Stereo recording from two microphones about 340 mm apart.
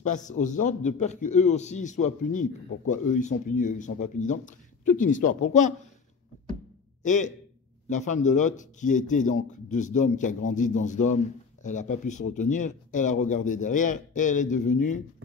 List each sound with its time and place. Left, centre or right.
0.0 s a man's voice: left
7.0 s a man's voice: left